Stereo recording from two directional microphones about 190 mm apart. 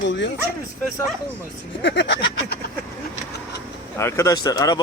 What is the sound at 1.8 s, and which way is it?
Speech, 65° left (ahead or behind).